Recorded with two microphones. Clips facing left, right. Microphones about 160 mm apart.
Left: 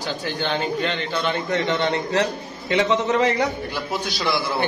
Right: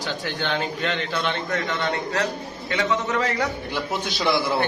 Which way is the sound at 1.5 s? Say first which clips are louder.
Left 4 dB; 25° left (ahead or behind).